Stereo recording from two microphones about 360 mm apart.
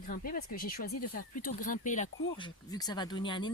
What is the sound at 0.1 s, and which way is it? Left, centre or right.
Speech, left.